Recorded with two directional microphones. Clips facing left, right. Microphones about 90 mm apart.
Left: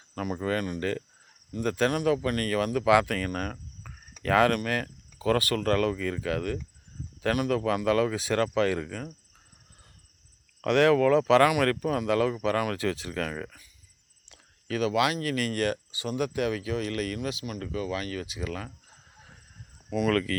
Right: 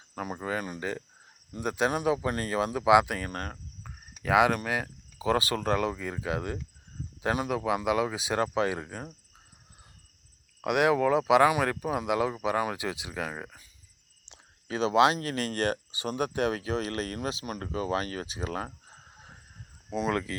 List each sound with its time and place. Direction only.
0.1 s speech: 20° right (ahead or behind)
10.6 s speech: 15° right (ahead or behind)